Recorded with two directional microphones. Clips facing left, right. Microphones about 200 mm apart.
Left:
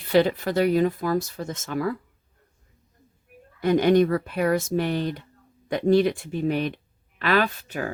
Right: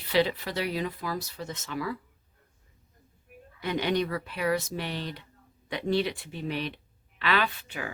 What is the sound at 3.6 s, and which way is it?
Speech, 50° left (ahead or behind).